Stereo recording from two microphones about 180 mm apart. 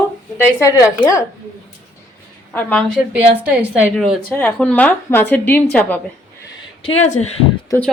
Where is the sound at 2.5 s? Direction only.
10° left (ahead or behind).